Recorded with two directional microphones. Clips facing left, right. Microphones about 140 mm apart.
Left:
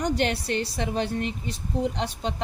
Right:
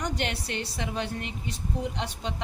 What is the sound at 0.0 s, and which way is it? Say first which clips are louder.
A woman's voice: left 6 dB; 35° left (ahead or behind).